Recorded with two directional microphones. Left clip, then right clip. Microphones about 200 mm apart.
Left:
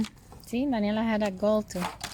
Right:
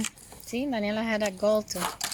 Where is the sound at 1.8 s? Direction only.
25° left (ahead or behind).